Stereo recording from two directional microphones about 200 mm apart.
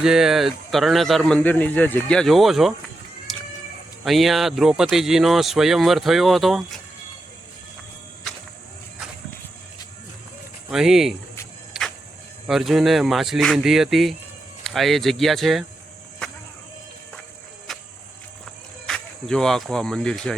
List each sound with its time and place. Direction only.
0.0 s speech: 5° right (ahead or behind)
3.3 s a sound: centre (ahead or behind)
4.0 s speech: centre (ahead or behind)
10.7 s speech: centre (ahead or behind)
11.7 s a sound: 5° right (ahead or behind)
12.5 s speech: centre (ahead or behind)
17.7 s music: centre (ahead or behind)
18.9 s speech: 5° left (ahead or behind)